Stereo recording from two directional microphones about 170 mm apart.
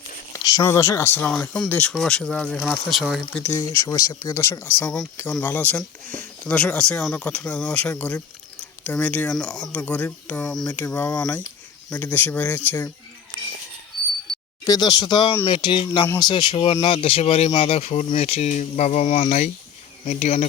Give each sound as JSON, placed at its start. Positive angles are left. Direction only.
{"t": 0.3, "sound": "speech", "side_deg": 20}
{"t": 3.5, "sound": "speech", "side_deg": 25}
{"t": 14.3, "sound": "a sound", "side_deg": 0}
{"t": 14.7, "sound": "speech", "side_deg": 25}